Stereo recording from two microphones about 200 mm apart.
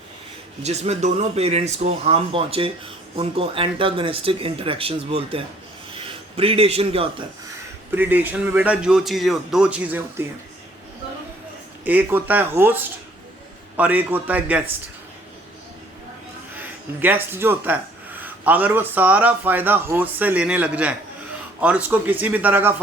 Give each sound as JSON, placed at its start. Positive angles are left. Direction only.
{"t": 0.6, "sound": "speech", "side_deg": -35}
{"t": 7.9, "sound": "speech", "side_deg": -10}
{"t": 11.9, "sound": "speech", "side_deg": -10}
{"t": 13.7, "sound": "speech", "side_deg": -10}
{"t": 16.6, "sound": "speech", "side_deg": -10}